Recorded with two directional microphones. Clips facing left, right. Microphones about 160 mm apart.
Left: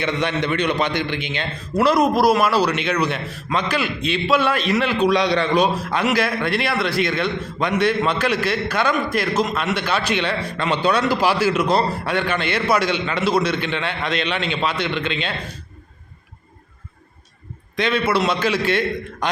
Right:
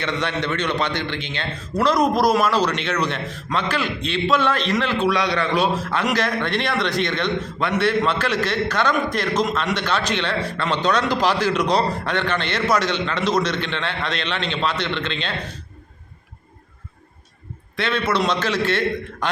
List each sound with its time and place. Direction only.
0.0 s a man's voice: 15° left (ahead or behind)
5.7 s a man's voice: 15° left (ahead or behind)
17.7 s a man's voice: 15° left (ahead or behind)